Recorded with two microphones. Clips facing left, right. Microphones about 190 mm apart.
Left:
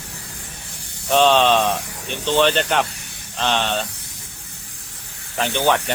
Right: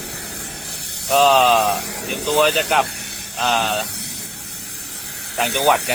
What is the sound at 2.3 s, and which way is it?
Speech, 10° right (ahead or behind).